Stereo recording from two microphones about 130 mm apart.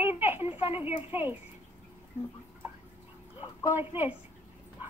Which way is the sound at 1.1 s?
15° right (ahead or behind).